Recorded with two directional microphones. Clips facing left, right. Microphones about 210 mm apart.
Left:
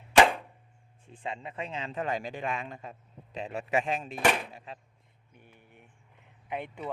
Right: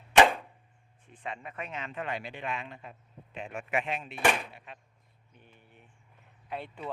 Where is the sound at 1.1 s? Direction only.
25° left (ahead or behind).